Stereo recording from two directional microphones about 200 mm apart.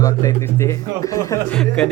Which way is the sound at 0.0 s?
15° left (ahead or behind).